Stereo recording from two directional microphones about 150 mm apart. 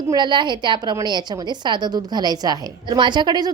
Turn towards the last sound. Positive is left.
turn(degrees=-30)  # may be behind; listen again after turning